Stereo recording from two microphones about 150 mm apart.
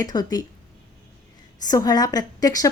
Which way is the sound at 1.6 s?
25° left (ahead or behind).